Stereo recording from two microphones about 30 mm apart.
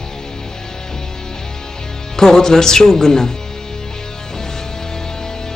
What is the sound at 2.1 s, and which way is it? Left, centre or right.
Speech, centre.